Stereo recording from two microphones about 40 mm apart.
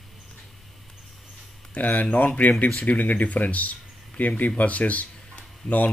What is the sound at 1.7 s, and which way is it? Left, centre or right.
Speech, left.